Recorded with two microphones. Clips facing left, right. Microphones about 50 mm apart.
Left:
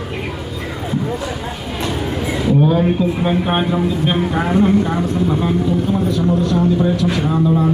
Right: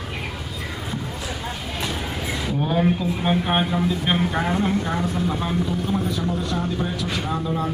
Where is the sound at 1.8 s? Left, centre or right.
Centre.